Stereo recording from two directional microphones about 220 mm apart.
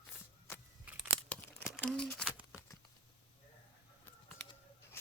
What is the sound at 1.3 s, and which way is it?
Crumpling, 5° left (ahead or behind).